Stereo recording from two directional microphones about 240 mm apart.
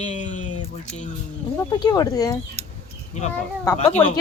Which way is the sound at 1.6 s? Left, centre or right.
Centre.